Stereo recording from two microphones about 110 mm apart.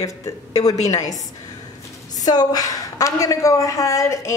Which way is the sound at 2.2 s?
40° left (ahead or behind).